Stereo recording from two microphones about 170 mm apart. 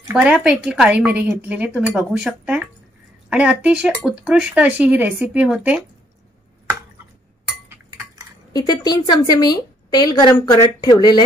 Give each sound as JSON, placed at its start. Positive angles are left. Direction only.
{"t": 0.1, "sound": "a woman's voice", "side_deg": -5}
{"t": 8.5, "sound": "a woman's voice", "side_deg": 25}